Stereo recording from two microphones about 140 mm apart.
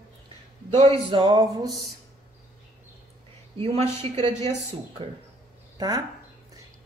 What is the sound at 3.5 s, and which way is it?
Speech, 50° right (ahead or behind).